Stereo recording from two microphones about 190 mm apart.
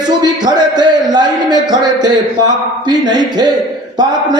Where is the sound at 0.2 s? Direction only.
20° right (ahead or behind).